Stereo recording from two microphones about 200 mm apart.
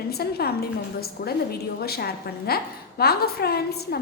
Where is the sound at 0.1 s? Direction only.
50° left (ahead or behind).